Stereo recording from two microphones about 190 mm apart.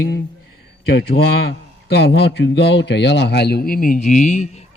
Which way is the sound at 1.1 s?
55° left (ahead or behind).